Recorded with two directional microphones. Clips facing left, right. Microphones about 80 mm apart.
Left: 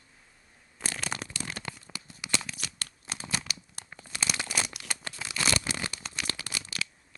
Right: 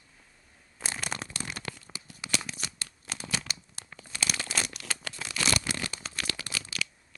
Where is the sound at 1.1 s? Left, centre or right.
Right.